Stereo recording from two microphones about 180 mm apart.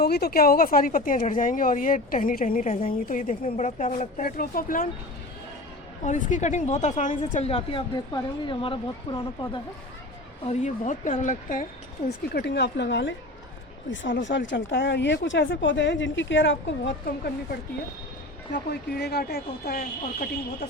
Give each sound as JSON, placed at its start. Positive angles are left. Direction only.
{"t": 0.0, "sound": "a woman's voice", "side_deg": 60}
{"t": 2.7, "sound": "a woman's voice", "side_deg": 30}
{"t": 3.1, "sound": "a woman's voice", "side_deg": 50}
{"t": 4.2, "sound": "a woman's voice", "side_deg": 55}
{"t": 6.1, "sound": "a woman's voice", "side_deg": 45}
{"t": 10.4, "sound": "a woman's voice", "side_deg": 40}
{"t": 12.3, "sound": "a woman's voice", "side_deg": 65}